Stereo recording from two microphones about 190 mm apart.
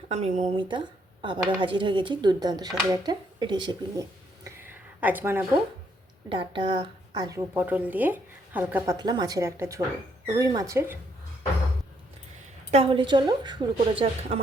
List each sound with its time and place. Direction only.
0.1 s a woman's voice: 35° right (ahead or behind)
4.4 s a sound: 10° right (ahead or behind)
6.2 s a woman's voice: 25° right (ahead or behind); by 9.0 s 10° right (ahead or behind)
9.0 s a woman's voice: 20° right (ahead or behind)
12.7 s speech: 30° right (ahead or behind)